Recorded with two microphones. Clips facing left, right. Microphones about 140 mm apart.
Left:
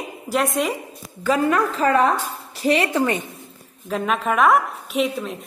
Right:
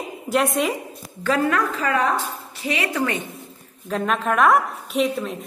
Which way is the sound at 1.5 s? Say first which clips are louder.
Left 3 dB; 30° left (ahead or behind).